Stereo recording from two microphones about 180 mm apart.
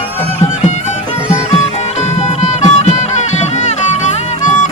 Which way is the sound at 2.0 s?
40° left (ahead or behind).